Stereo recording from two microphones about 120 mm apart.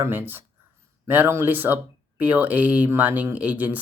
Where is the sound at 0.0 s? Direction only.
15° right (ahead or behind).